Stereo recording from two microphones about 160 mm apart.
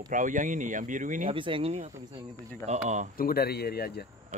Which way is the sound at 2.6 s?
45° right (ahead or behind).